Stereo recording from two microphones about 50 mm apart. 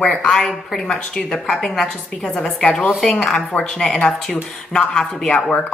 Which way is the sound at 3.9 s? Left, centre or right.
Left.